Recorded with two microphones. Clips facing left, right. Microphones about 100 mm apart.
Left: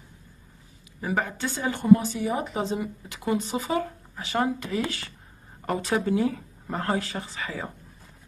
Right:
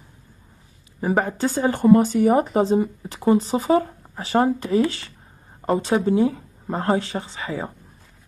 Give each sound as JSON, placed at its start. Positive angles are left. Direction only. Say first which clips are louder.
{"t": 1.0, "sound": "speech", "louder": "right 7 dB", "side_deg": -35}